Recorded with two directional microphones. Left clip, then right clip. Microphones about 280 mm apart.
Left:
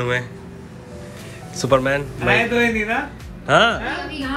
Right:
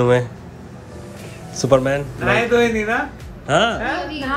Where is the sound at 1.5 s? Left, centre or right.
Centre.